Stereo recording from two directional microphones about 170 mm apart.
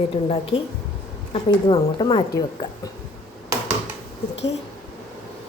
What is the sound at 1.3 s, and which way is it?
A woman's voice, 30° left (ahead or behind).